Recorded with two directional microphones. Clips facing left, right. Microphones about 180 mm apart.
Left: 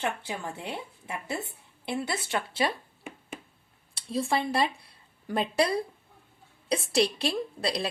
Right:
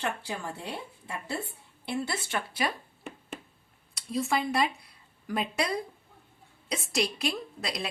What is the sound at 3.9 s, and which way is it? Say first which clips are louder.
A woman's voice: left 1 dB; 30° left (ahead or behind).